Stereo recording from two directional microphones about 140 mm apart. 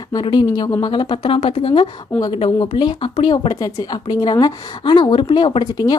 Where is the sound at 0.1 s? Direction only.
30° left (ahead or behind).